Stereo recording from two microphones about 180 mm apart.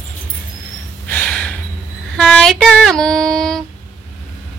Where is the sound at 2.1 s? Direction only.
5° left (ahead or behind).